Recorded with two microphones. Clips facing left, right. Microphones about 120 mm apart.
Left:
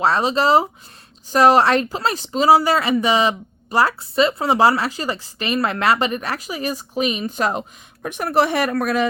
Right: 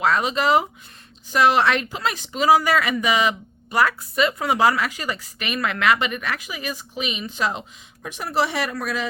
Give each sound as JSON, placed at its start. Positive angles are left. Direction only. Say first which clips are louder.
{"t": 0.0, "sound": "speech", "louder": "left 3 dB", "side_deg": 30}